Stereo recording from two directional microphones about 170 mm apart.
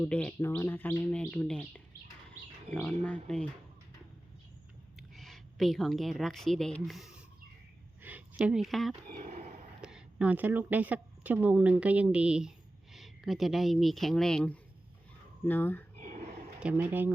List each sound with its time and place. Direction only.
0.0 s speech: 5° left (ahead or behind)
2.7 s speech: 35° right (ahead or behind)
3.0 s speech: 5° left (ahead or behind)
4.9 s a woman's voice: centre (ahead or behind)
8.0 s a sound: 10° right (ahead or behind)
9.0 s speech: 60° right (ahead or behind)
9.3 s a sound: 45° right (ahead or behind)
9.8 s a woman's voice: 5° right (ahead or behind); by 15.8 s 10° left (ahead or behind)
16.0 s a sound: 45° right (ahead or behind)
16.6 s speech: 10° right (ahead or behind)